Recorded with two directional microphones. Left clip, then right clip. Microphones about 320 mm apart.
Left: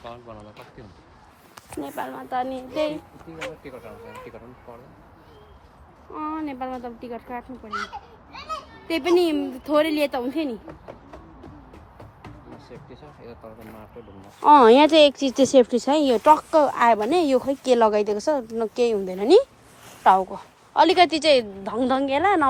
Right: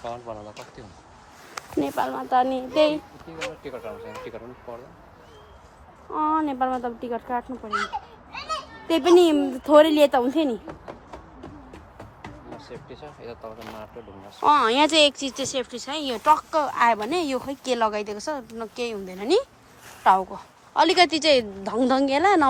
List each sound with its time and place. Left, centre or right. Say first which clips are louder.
0.0 s speech: right 6 dB; right
2.0 s a woman's voice: right 5 dB; centre
6.1 s a woman's voice: right 7 dB; centre
8.3 s children playing: right 2 dB; right
8.9 s a woman's voice: right 4 dB; centre
12.6 s a woman's voice: right 4 dB; centre
14.4 s a woman's voice: left 5 dB; centre